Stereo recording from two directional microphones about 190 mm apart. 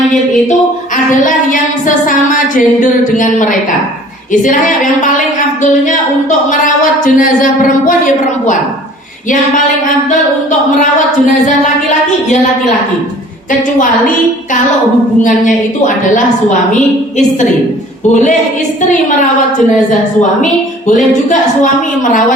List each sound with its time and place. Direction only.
2.0 s a woman's voice: 45° left (ahead or behind)
7.0 s a woman's voice: 45° left (ahead or behind)
15.2 s a woman's voice: 45° left (ahead or behind)
20.4 s a woman's voice: 40° left (ahead or behind)